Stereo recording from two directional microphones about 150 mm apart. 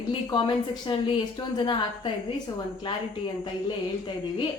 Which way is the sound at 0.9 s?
30° left (ahead or behind).